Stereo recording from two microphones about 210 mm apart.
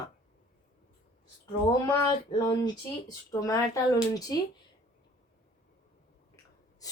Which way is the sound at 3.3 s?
15° left (ahead or behind).